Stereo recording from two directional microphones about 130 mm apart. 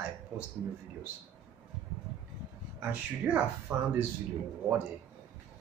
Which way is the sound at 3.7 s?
20° right (ahead or behind).